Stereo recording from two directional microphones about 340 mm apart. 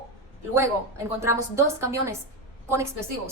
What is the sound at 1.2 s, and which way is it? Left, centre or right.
A woman's voice, centre.